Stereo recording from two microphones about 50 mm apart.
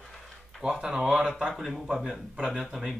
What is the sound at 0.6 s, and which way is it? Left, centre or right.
Speech, centre.